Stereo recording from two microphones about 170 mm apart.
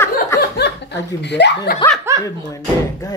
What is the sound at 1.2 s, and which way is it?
Speech, 90° left.